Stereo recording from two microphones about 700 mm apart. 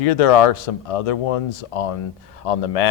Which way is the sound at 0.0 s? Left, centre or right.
Left.